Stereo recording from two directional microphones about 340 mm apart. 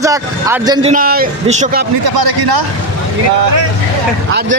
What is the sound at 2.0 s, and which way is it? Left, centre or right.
Speech, right.